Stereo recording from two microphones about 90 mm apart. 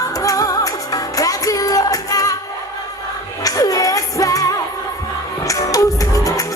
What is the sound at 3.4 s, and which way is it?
Music, 40° left (ahead or behind).